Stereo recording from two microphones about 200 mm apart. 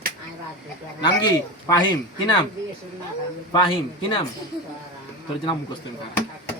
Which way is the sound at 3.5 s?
25° left (ahead or behind).